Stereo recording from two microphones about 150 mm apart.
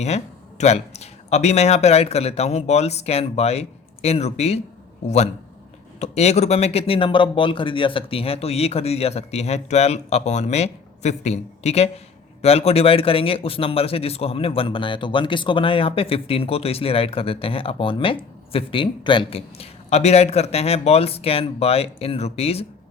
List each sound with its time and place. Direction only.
0.6 s speech: 50° left (ahead or behind)